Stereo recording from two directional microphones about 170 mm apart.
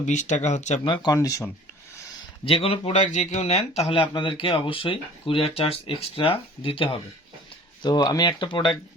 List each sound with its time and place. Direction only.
0.0 s speech: 45° left (ahead or behind)
1.0 s speech: 20° left (ahead or behind)
2.4 s speech: 35° left (ahead or behind)